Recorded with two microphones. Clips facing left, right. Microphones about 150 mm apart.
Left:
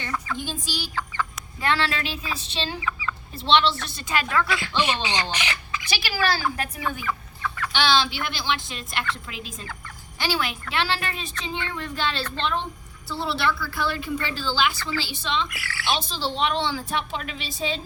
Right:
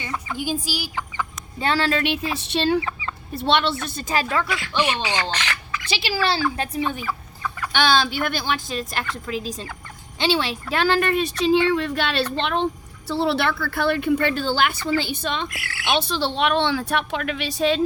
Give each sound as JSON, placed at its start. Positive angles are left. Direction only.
{"t": 0.3, "sound": "speech", "side_deg": -10}
{"t": 1.6, "sound": "speech", "side_deg": -40}
{"t": 2.0, "sound": "a woman's voice", "side_deg": -65}
{"t": 2.8, "sound": "chicken", "side_deg": -35}
{"t": 3.4, "sound": "a woman's voice", "side_deg": -55}
{"t": 4.3, "sound": "speech", "side_deg": -20}
{"t": 4.9, "sound": "speech", "side_deg": 20}
{"t": 5.3, "sound": "bird", "side_deg": 15}
{"t": 5.9, "sound": "speech", "side_deg": -25}
{"t": 7.1, "sound": "chicken", "side_deg": -10}
{"t": 7.7, "sound": "a woman's voice", "side_deg": -50}
{"t": 10.2, "sound": "a woman's voice", "side_deg": -25}
{"t": 15.9, "sound": "a woman's voice", "side_deg": -65}